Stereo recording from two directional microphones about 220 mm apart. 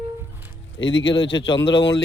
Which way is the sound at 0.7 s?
55° left (ahead or behind).